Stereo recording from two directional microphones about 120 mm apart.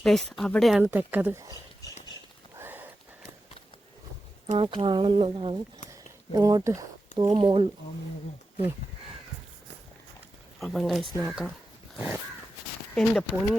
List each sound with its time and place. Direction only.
0.0 s speech: 5° left (ahead or behind)
0.8 s speech: 15° right (ahead or behind)
2.6 s sniff: 15° right (ahead or behind)
4.5 s speech: 50° right (ahead or behind)
5.9 s a sound: 30° right (ahead or behind)
7.3 s speech: 45° right (ahead or behind)
10.6 s speech: centre (ahead or behind)
12.9 s speech: 5° left (ahead or behind)